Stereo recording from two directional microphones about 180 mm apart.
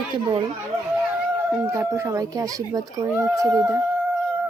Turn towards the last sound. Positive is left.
turn(degrees=-15)  # may be behind; listen again after turning